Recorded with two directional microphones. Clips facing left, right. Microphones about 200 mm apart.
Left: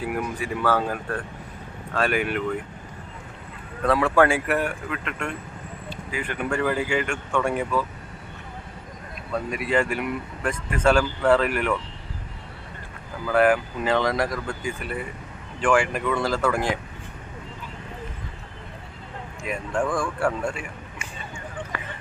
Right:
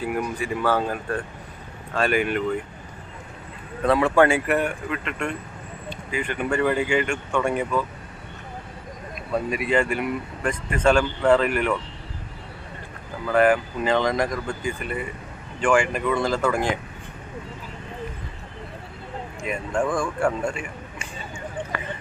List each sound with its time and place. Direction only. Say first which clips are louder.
0.0 s speech: right 1 dB; 5° left (ahead or behind)
2.0 s speech: right 2 dB; centre (ahead or behind)
3.8 s speech: right 1 dB; centre (ahead or behind)
9.3 s speech: right 2 dB; 5° right (ahead or behind)
13.2 s speech: right 1 dB; 5° left (ahead or behind)
19.4 s speech: right 1 dB; centre (ahead or behind)